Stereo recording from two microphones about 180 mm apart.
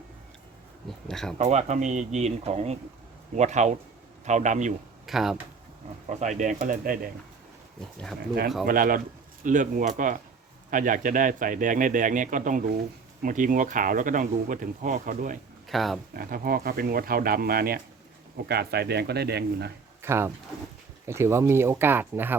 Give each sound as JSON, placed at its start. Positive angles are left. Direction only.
{"t": 0.9, "sound": "speech", "side_deg": 0}
{"t": 1.4, "sound": "speech", "side_deg": -40}
{"t": 5.0, "sound": "speech", "side_deg": 0}
{"t": 6.1, "sound": "speech", "side_deg": -40}
{"t": 8.6, "sound": "speech", "side_deg": -50}
{"t": 15.7, "sound": "speech", "side_deg": 0}
{"t": 16.1, "sound": "speech", "side_deg": -55}
{"t": 20.0, "sound": "speech", "side_deg": -15}